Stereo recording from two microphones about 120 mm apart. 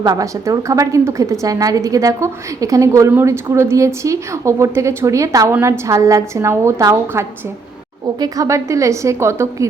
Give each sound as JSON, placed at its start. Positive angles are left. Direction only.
{"t": 0.0, "sound": "a woman's voice", "side_deg": -30}